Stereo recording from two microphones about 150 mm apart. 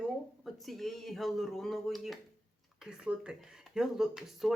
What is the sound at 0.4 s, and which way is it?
Speech, centre (ahead or behind).